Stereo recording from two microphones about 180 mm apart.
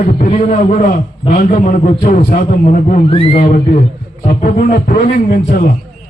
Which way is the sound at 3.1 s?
35° left (ahead or behind).